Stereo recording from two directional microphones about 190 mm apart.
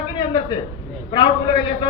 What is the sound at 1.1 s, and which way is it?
Speech, 25° left (ahead or behind).